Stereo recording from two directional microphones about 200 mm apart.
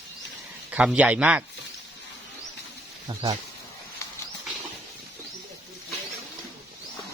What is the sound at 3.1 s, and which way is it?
Speech, 25° right (ahead or behind).